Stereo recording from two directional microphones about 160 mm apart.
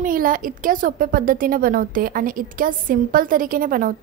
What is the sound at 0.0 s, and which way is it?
A woman's voice, 60° right (ahead or behind).